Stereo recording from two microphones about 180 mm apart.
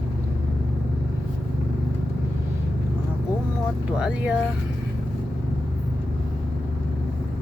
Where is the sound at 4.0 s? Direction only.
5° right (ahead or behind).